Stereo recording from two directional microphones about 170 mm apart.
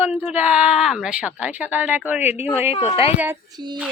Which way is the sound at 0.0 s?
10° right (ahead or behind).